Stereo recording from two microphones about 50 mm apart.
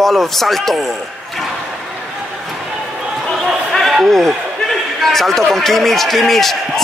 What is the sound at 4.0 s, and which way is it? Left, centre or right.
A man's voice, centre.